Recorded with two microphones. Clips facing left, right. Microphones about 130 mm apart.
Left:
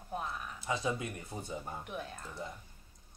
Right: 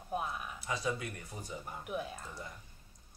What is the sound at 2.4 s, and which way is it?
Speech, 25° left (ahead or behind).